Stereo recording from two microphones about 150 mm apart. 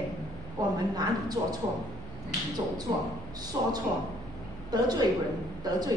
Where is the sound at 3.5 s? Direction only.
25° right (ahead or behind).